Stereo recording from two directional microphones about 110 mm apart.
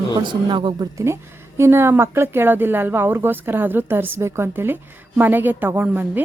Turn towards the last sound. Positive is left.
turn(degrees=-20)  # may be behind; listen again after turning